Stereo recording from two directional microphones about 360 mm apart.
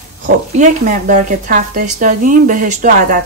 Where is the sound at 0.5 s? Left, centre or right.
Right.